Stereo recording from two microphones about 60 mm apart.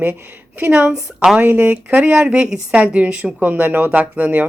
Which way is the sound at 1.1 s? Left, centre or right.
Centre.